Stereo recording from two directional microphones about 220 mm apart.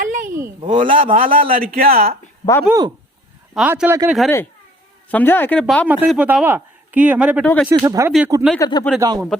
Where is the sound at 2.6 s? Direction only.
15° right (ahead or behind).